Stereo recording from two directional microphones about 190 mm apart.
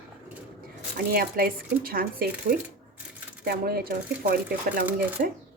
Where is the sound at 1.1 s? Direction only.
50° right (ahead or behind).